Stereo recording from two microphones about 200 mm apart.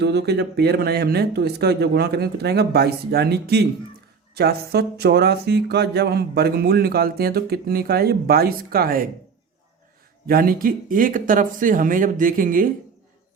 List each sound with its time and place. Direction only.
0.0 s speech: 55° right (ahead or behind)
10.2 s speech: 45° right (ahead or behind)